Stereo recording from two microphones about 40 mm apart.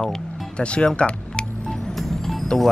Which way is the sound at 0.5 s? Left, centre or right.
Left.